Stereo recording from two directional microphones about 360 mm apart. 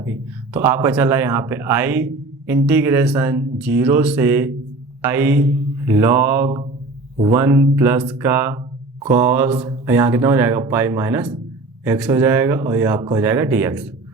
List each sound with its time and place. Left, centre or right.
0.0 s speech: centre